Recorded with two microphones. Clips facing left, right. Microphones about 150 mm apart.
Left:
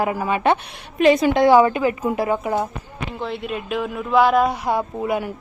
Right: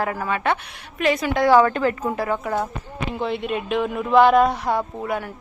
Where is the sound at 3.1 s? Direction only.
Centre (ahead or behind).